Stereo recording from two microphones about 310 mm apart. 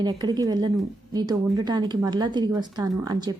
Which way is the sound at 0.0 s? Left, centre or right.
Centre.